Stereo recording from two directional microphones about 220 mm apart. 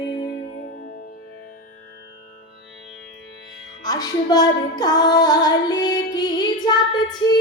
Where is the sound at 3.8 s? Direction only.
15° left (ahead or behind).